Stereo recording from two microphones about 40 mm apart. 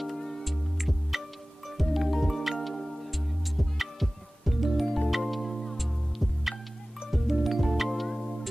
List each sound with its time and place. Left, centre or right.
0.0 s music: centre